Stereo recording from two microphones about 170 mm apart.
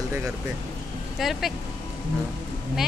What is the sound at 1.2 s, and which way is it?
Speech, centre (ahead or behind).